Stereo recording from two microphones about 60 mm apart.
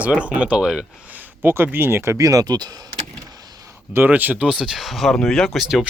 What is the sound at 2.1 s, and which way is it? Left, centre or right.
Speech, right.